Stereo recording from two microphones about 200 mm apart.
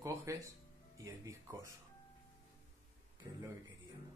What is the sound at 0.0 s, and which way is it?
Music, 15° right (ahead or behind).